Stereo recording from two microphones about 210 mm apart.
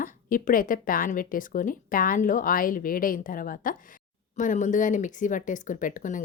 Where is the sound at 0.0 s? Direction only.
40° left (ahead or behind).